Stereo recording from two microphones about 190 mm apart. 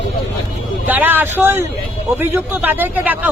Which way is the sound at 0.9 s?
10° right (ahead or behind).